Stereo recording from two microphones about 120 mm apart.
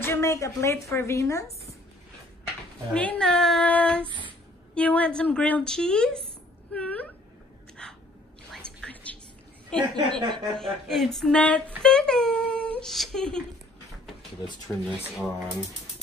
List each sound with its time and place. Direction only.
0.0 s a woman's voice: 25° left (ahead or behind)
2.9 s speech: 10° left (ahead or behind)
6.7 s a sound: 10° left (ahead or behind)
8.8 s whispering: 10° left (ahead or behind)
9.8 s a woman's voice: 40° right (ahead or behind)
10.3 s speech: 5° left (ahead or behind)
14.9 s speech: 5° right (ahead or behind)